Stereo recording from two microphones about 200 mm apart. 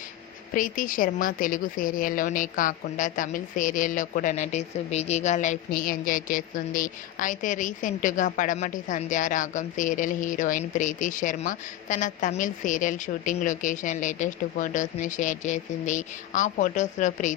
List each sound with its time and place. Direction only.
0.5 s a woman's voice: 45° left (ahead or behind)